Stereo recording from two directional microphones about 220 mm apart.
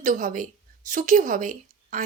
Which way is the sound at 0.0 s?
35° right (ahead or behind).